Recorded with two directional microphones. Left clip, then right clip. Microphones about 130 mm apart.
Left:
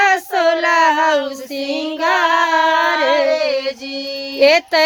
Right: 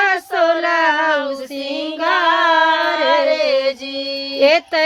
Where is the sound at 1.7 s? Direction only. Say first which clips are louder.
Left 1 dB; 30° left (ahead or behind).